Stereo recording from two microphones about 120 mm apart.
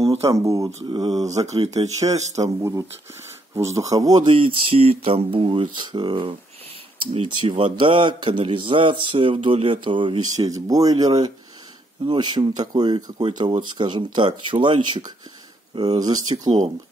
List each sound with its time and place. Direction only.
0.0 s speech: 55° right (ahead or behind)
0.3 s speech: 25° right (ahead or behind)
0.8 s speech: 35° right (ahead or behind)
1.4 s speech: 65° right (ahead or behind)
2.4 s a man's voice: 25° right (ahead or behind)